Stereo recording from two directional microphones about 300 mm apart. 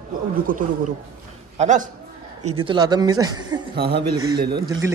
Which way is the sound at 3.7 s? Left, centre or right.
Right.